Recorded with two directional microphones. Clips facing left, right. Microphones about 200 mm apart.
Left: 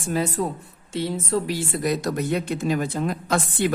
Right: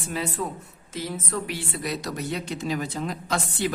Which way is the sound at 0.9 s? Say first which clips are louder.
Left 6 dB; 30° left (ahead or behind).